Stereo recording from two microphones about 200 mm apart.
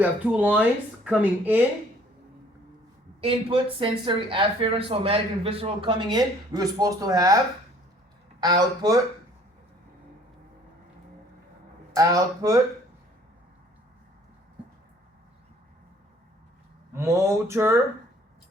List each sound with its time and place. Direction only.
0.0 s speech: 10° right (ahead or behind)
3.2 s speech: 25° right (ahead or behind)
8.4 s speech: 20° right (ahead or behind)
11.9 s speech: 15° right (ahead or behind)
16.9 s speech: 15° right (ahead or behind)